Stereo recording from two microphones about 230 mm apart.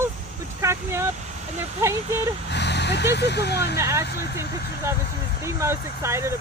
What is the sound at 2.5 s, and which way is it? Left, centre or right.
Speech, left.